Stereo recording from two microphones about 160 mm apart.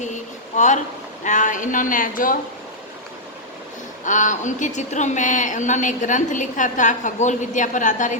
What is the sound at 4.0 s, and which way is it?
A woman's voice, 50° left (ahead or behind).